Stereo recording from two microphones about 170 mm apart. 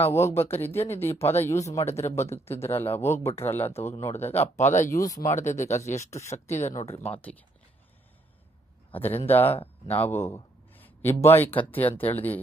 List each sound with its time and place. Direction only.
0.1 s a man's voice: 15° left (ahead or behind)
4.1 s speech: 40° left (ahead or behind)
4.9 s speech: 20° left (ahead or behind)
5.2 s speech: 45° left (ahead or behind)
9.0 s a man's voice: 10° left (ahead or behind)